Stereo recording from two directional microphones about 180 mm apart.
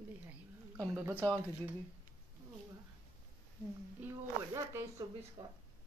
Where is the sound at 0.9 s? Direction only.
10° right (ahead or behind).